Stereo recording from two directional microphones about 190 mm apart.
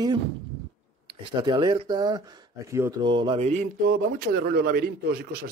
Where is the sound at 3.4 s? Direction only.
40° right (ahead or behind).